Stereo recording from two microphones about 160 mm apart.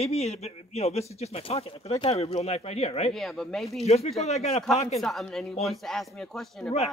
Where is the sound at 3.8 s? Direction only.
40° left (ahead or behind).